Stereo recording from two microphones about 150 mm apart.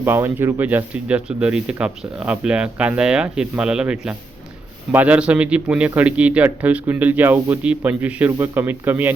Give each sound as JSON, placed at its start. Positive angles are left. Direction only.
{"t": 0.0, "sound": "speech", "side_deg": -15}